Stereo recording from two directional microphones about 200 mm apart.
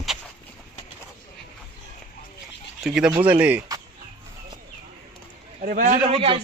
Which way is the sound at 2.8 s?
5° right (ahead or behind).